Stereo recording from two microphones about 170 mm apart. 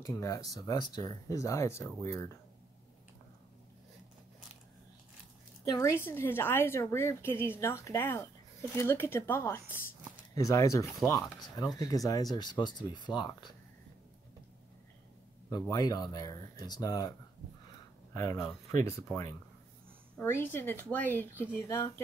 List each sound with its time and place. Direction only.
0.0 s speech: 20° left (ahead or behind)
5.7 s speech: 20° left (ahead or behind)
15.5 s speech: 20° left (ahead or behind)
18.1 s speech: 20° left (ahead or behind)